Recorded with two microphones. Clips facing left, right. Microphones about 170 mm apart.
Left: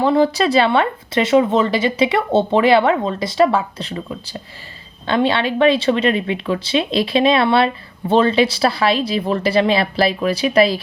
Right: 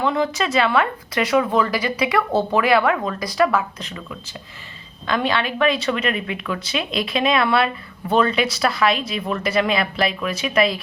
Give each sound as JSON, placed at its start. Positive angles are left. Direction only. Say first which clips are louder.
{"t": 0.0, "sound": "speech", "louder": "left 6 dB", "side_deg": 35}